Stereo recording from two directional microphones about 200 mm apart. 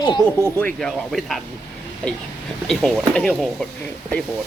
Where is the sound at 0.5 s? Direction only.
5° left (ahead or behind).